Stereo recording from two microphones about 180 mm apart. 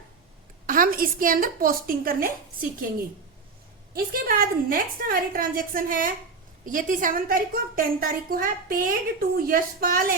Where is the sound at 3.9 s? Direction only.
55° right (ahead or behind).